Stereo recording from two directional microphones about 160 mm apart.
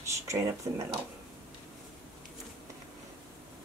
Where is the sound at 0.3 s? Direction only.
20° right (ahead or behind).